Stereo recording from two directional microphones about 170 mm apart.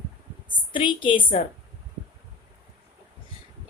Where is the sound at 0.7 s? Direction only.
30° left (ahead or behind).